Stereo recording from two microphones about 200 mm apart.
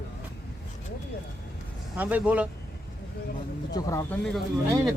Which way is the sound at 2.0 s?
10° right (ahead or behind).